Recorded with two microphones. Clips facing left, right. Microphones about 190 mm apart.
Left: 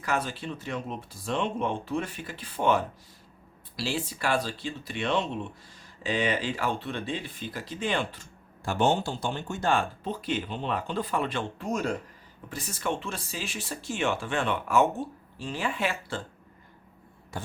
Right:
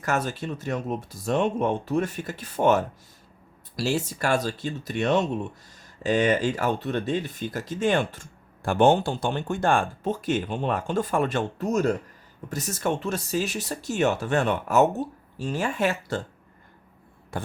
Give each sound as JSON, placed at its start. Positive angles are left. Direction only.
{"t": 0.0, "sound": "speech", "side_deg": -45}
{"t": 17.3, "sound": "vehicle", "side_deg": -55}